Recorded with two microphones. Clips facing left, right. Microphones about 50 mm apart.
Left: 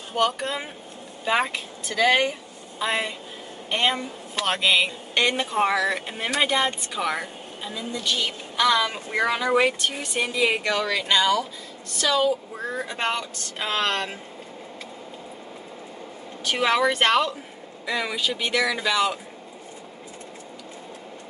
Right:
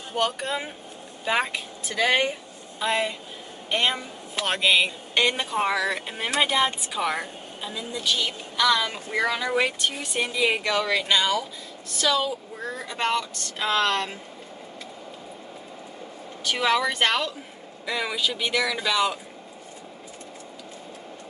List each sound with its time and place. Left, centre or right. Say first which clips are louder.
0.1 s speech: left 2 dB; centre
2.8 s speech: right 1 dB; centre
8.5 s speech: left 1 dB; centre
12.7 s speech: right 1 dB; centre
16.4 s speech: left 2 dB; centre
17.8 s speech: left 1 dB; centre